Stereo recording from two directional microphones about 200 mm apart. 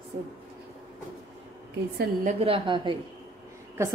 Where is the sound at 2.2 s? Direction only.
30° right (ahead or behind).